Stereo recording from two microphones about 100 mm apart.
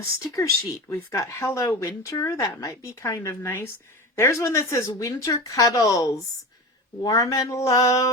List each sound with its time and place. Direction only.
0.3 s a woman's voice: 30° left (ahead or behind)